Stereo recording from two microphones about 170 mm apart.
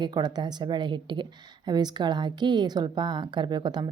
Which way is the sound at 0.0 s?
25° right (ahead or behind).